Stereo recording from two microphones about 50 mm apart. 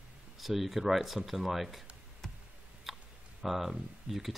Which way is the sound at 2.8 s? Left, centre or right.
Centre.